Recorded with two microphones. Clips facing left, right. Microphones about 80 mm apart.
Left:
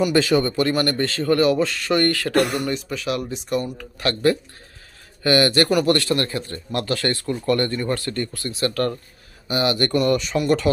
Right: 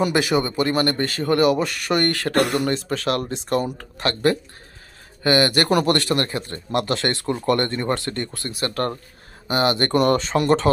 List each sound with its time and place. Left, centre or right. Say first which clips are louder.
0.1 s speech: left 2 dB; centre
2.5 s speech: right 3 dB; right
4.0 s speech: left 1 dB; right